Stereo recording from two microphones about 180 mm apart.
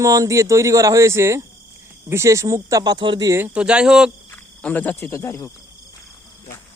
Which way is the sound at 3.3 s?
10° right (ahead or behind).